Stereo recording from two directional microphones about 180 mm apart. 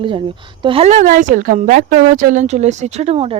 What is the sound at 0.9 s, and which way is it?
Speech, 45° right (ahead or behind).